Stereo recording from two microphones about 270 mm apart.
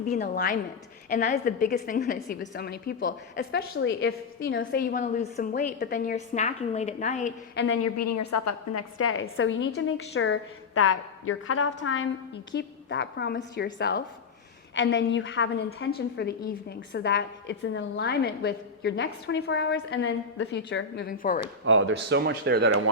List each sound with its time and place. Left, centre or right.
0.1 s a woman's voice: left
7.9 s a woman's voice: left
21.6 s a man's voice: right